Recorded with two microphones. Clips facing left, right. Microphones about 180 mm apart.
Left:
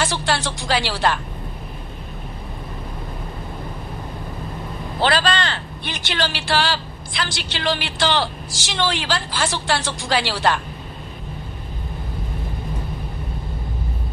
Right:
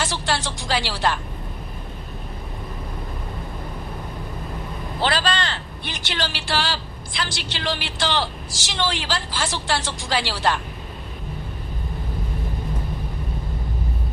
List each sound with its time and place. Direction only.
0.0 s speech: 65° left (ahead or behind)
5.0 s speech: 70° left (ahead or behind)